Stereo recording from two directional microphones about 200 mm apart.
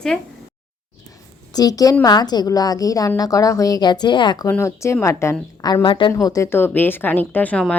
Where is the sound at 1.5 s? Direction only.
20° left (ahead or behind).